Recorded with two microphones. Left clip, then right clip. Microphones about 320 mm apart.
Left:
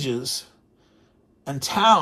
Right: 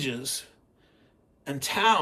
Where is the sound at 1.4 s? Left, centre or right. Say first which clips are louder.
Left 6 dB; centre.